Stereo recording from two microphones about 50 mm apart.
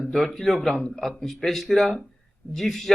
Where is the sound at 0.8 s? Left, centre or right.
Centre.